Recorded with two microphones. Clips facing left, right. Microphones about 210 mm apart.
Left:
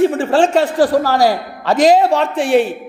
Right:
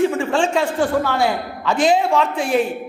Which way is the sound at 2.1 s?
70° left (ahead or behind).